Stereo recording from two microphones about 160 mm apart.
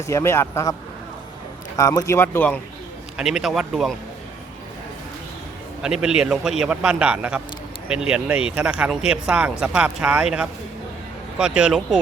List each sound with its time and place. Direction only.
0.0 s speech: 20° left (ahead or behind)
3.2 s speech: 5° right (ahead or behind)
5.8 s speech: 5° right (ahead or behind)